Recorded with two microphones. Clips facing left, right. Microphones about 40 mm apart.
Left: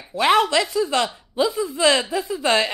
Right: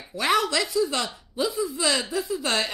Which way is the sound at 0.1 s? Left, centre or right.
Left.